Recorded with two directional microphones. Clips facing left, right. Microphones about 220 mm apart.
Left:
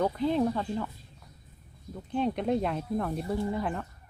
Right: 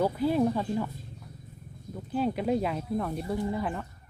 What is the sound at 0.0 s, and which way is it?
Speech, 5° right (ahead or behind).